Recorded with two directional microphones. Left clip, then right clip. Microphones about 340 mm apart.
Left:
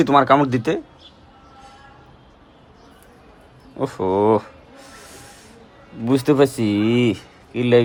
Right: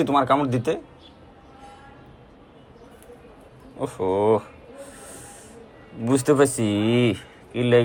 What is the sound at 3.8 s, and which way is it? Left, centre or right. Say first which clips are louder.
Speech: left 3 dB; centre.